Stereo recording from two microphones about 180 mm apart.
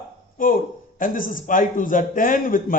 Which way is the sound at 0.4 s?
50° left (ahead or behind).